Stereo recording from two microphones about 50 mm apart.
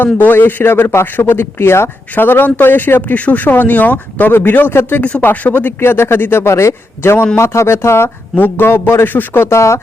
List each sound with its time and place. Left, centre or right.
0.0 s a man's voice: left
2.1 s speech: left
4.3 s a man's voice: left
5.2 s speech: left
5.8 s a man's voice: left
6.4 s a man's voice: left
7.3 s a man's voice: left
9.5 s speech: left